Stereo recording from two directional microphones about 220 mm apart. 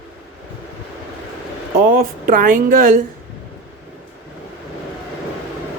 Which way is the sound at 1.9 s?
40° right (ahead or behind).